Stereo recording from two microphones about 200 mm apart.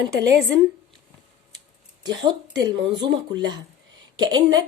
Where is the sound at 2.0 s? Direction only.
20° right (ahead or behind).